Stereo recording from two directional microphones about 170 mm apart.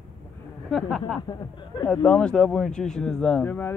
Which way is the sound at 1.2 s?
25° left (ahead or behind).